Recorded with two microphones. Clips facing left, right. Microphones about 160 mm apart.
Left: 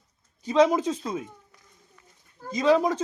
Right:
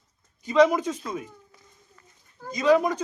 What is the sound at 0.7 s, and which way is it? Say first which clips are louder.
Speech: left 2 dB; 30° left (ahead or behind).